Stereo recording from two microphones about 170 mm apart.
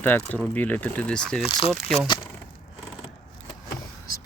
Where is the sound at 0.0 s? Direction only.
10° left (ahead or behind).